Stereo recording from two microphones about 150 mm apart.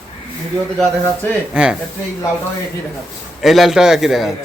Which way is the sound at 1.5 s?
5° right (ahead or behind).